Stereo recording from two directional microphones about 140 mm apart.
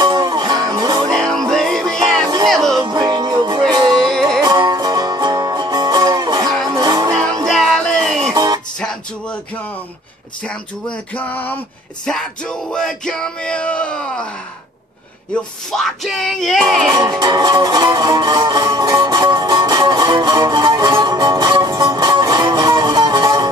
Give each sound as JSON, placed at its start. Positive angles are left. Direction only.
{"t": 0.0, "sound": "music", "side_deg": -30}
{"t": 1.0, "sound": "music", "side_deg": 5}
{"t": 2.8, "sound": "music", "side_deg": -30}
{"t": 3.9, "sound": "music", "side_deg": 5}
{"t": 4.4, "sound": "music", "side_deg": -30}
{"t": 7.4, "sound": "music", "side_deg": 0}
{"t": 8.3, "sound": "music", "side_deg": -25}
{"t": 11.1, "sound": "a sound", "side_deg": 15}
{"t": 12.1, "sound": "bellow", "side_deg": 5}
{"t": 15.7, "sound": "bellow", "side_deg": 0}
{"t": 17.2, "sound": "music", "side_deg": -30}